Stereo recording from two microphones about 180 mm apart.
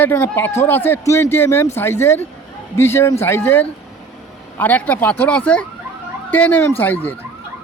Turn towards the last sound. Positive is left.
turn(degrees=10)  # may be behind; listen again after turning